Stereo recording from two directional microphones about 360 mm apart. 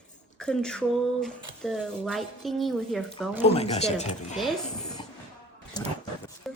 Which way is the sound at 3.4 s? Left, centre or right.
Centre.